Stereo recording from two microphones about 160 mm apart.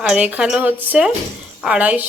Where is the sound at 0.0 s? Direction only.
10° right (ahead or behind).